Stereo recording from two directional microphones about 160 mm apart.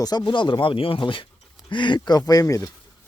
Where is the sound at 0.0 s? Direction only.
25° left (ahead or behind).